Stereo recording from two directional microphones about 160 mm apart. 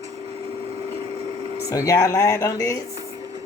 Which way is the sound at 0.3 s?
40° right (ahead or behind).